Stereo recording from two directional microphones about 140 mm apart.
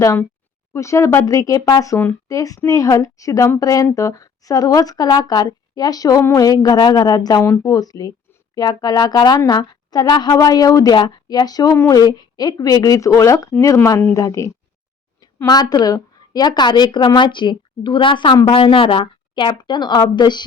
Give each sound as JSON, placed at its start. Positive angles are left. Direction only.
{"t": 0.7, "sound": "a woman's voice", "side_deg": 20}